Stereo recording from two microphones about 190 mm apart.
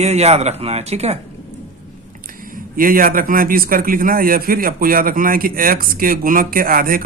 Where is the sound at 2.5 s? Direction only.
45° right (ahead or behind).